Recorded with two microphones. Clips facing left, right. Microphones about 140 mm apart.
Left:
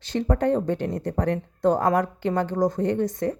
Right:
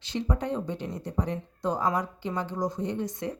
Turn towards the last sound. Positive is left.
turn(degrees=45)  # may be behind; listen again after turning